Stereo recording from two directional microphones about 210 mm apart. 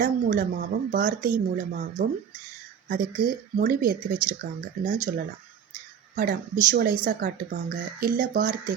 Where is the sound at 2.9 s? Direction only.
45° right (ahead or behind).